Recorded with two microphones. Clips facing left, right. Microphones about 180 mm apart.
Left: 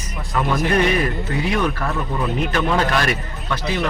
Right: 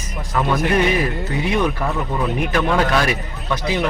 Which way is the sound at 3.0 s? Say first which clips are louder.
Right 1 dB; 15° right (ahead or behind).